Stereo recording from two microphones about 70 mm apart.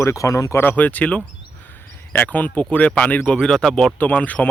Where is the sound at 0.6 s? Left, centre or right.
Left.